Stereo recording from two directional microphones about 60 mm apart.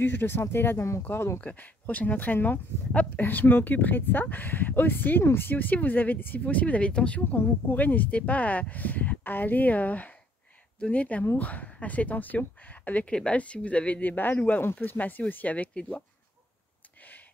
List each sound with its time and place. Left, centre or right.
0.0 s speech: left
1.4 s speech: left
7.2 s speech: left